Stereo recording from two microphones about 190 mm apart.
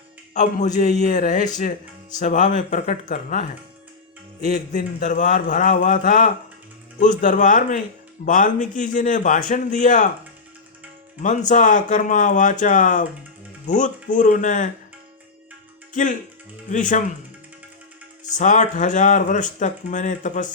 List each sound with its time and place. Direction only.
0.3 s a man's voice: 40° left (ahead or behind)
4.4 s speech: 55° left (ahead or behind)
4.7 s a man's voice: 40° left (ahead or behind)
11.2 s a man's voice: 40° left (ahead or behind)
15.9 s speech: 45° left (ahead or behind)
18.3 s speech: 40° left (ahead or behind)